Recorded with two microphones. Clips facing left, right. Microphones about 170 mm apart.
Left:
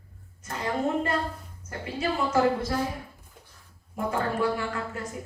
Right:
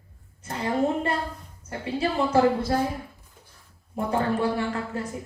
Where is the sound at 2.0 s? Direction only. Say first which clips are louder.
Right 3 dB; 30° right (ahead or behind).